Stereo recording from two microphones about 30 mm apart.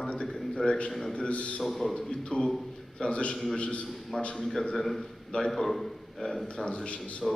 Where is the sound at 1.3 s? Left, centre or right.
Left.